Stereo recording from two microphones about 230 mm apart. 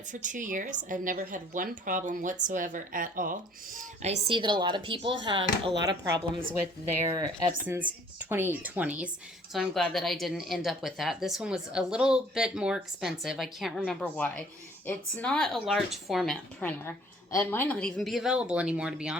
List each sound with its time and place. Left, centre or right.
0.1 s speech: right; by 19.1 s centre